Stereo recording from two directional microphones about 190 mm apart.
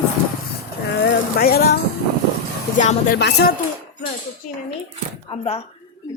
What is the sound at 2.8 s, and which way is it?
Speech, 45° left (ahead or behind).